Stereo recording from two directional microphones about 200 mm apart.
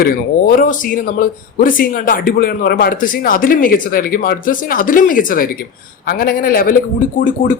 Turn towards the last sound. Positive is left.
turn(degrees=40)  # may be behind; listen again after turning